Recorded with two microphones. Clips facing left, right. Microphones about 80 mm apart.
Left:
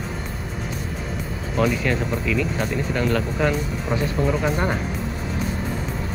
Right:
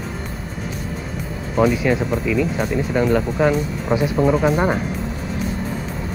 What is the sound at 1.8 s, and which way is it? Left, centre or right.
Speech, centre.